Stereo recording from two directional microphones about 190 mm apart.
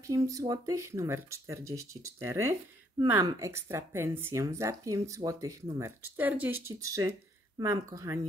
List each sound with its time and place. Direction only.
0.0 s speech: 15° right (ahead or behind)